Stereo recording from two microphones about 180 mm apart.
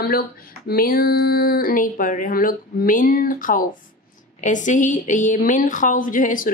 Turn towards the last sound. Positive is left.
turn(degrees=50)  # may be behind; listen again after turning